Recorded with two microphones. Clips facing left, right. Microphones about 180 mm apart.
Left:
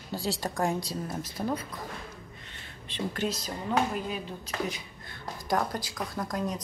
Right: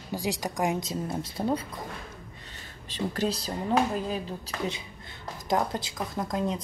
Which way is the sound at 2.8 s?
40° right (ahead or behind).